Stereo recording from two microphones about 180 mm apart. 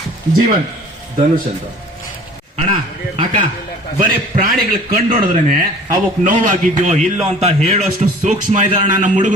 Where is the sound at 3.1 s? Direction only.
30° right (ahead or behind).